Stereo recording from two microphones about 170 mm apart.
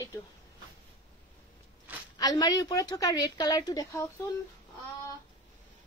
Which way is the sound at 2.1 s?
25° left (ahead or behind).